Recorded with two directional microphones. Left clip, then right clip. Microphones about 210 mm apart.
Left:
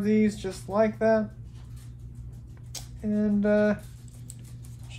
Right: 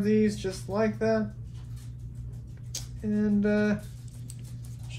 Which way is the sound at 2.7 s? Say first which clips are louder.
Left 1 dB; 30° left (ahead or behind).